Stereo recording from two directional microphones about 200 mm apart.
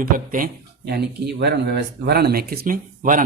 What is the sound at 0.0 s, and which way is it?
Speech, 45° right (ahead or behind).